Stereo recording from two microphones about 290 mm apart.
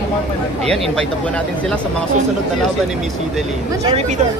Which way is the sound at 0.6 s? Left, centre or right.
Centre.